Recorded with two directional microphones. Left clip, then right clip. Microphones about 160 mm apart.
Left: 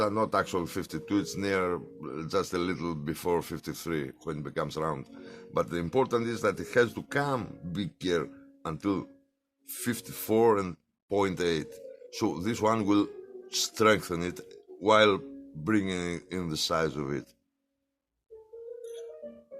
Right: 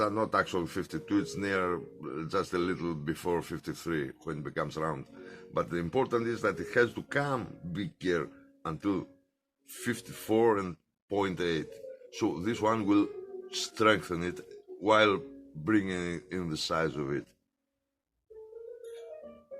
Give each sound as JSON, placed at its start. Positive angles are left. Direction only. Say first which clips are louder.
{"t": 0.0, "sound": "speech", "louder": "left 1 dB", "side_deg": 45}